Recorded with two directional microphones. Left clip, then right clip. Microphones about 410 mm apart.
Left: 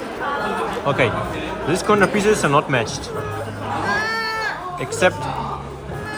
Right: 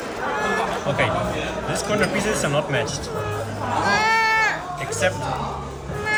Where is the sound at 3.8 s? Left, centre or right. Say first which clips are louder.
Right 4 dB; centre.